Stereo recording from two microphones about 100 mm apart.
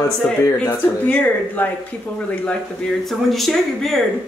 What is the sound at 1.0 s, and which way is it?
Speech, 15° left (ahead or behind).